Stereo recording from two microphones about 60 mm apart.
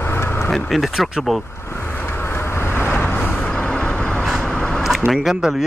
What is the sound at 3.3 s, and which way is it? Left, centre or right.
Vehicle, centre.